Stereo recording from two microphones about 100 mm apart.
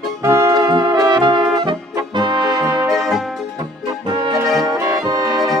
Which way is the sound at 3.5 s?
45° right (ahead or behind).